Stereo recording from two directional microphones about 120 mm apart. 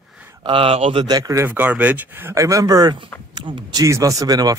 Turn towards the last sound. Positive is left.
turn(degrees=-30)  # may be behind; listen again after turning